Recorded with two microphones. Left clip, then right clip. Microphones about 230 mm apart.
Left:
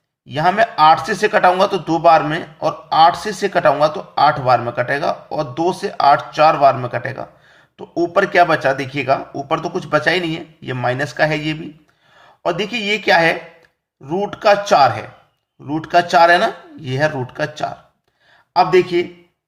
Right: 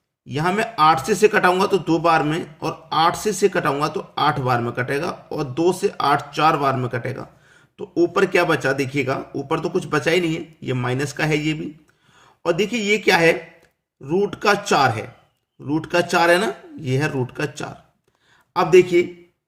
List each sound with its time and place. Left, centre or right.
0.3 s speech: centre